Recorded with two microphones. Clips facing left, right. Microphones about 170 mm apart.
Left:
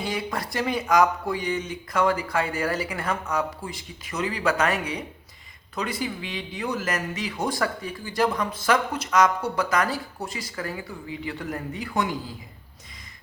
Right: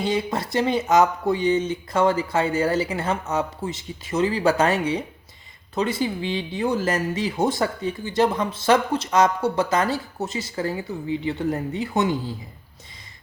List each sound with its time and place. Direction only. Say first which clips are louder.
0.0 s speech: right 5 dB; 25° right (ahead or behind)